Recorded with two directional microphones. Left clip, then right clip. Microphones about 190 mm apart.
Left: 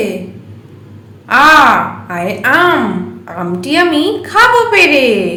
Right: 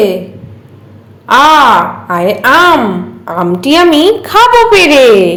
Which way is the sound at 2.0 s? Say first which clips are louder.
Right 6 dB; 25° right (ahead or behind).